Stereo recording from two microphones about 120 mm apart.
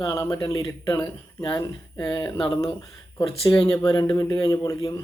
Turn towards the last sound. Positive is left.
turn(degrees=30)  # may be behind; listen again after turning